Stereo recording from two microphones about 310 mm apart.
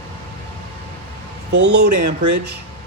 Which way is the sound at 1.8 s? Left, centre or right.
Right.